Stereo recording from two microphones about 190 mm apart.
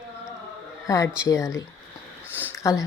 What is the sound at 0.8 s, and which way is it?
Speech, 15° left (ahead or behind).